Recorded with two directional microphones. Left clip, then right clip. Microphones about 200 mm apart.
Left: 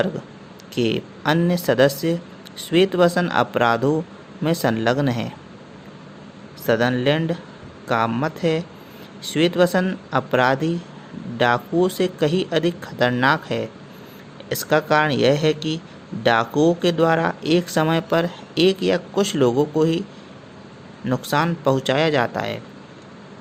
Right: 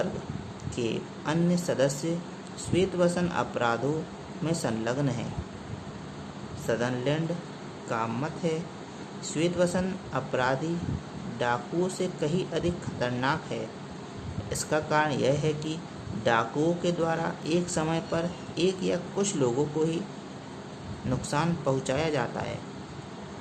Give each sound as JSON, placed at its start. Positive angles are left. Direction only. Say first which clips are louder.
{"t": 0.8, "sound": "speech", "louder": "left 9 dB", "side_deg": 30}
{"t": 6.7, "sound": "speech", "louder": "left 10 dB", "side_deg": 30}
{"t": 21.1, "sound": "speech", "louder": "left 9 dB", "side_deg": 30}